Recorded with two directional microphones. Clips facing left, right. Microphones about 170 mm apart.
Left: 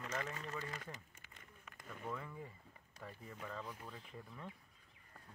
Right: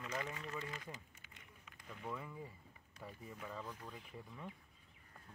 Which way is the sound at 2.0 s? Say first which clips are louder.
Even; 10° right (ahead or behind).